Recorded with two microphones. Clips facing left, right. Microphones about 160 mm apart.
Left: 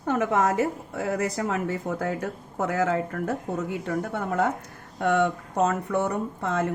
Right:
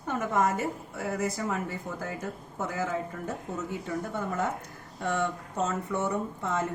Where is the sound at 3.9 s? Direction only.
65° left (ahead or behind).